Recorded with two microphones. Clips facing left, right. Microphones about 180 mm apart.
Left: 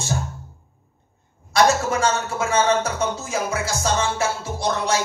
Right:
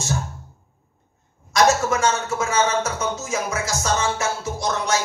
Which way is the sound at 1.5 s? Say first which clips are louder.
Even; 35° left (ahead or behind).